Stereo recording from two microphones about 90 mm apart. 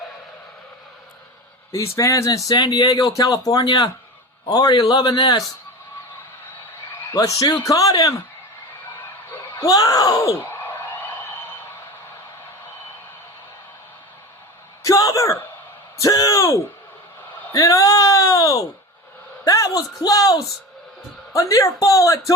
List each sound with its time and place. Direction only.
1.7 s a man's voice: 35° left (ahead or behind); by 5.4 s 55° left (ahead or behind)
7.2 s speech: 40° left (ahead or behind)
9.6 s speech: 40° left (ahead or behind)
10.5 s a sound: 25° left (ahead or behind)
14.8 s throat clearing: 40° left (ahead or behind)
16.0 s a sound: 40° left (ahead or behind)
19.5 s speech: 40° left (ahead or behind)